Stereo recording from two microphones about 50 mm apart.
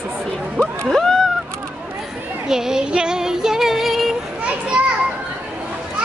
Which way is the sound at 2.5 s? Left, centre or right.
Centre.